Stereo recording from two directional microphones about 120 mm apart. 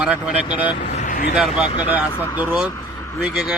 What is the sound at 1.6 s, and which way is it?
Speech, 40° left (ahead or behind).